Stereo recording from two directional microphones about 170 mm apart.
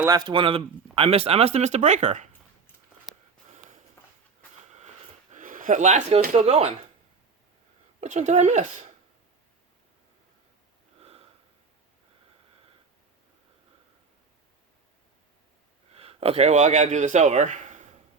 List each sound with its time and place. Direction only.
0.0 s speech: 20° right (ahead or behind); by 2.3 s 45° right (ahead or behind)
4.0 s a sound: 15° left (ahead or behind)
5.3 s a sound: 50° right (ahead or behind)
6.3 s speech: 35° right (ahead or behind)
8.0 s speech: 45° right (ahead or behind)
11.0 s sniff: 35° right (ahead or behind)
16.0 s speech: 35° right (ahead or behind)